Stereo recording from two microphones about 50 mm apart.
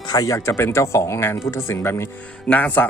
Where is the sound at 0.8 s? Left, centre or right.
Left.